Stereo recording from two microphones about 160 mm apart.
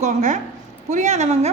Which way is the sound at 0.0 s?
50° right (ahead or behind).